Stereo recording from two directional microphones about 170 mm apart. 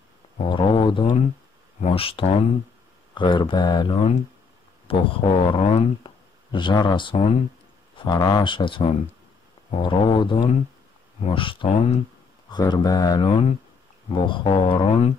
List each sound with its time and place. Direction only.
0.4 s speech: 30° left (ahead or behind)
12.4 s speech: 25° left (ahead or behind)